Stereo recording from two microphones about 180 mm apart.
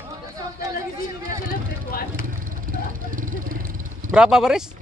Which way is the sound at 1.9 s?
55° left (ahead or behind).